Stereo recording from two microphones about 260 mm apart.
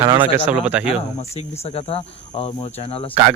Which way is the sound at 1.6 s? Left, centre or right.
Left.